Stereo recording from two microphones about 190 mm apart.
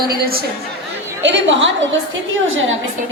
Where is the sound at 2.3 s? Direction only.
90° right.